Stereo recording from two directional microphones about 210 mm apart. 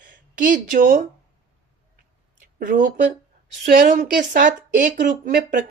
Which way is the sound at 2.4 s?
40° right (ahead or behind).